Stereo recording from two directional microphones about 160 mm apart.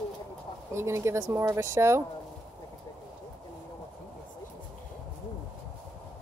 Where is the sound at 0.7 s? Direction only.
15° right (ahead or behind).